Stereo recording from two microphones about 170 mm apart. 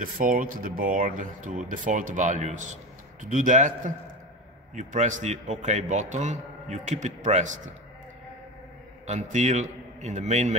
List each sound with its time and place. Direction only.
0.0 s a man's voice: 55° right (ahead or behind)
9.0 s a man's voice: 45° right (ahead or behind)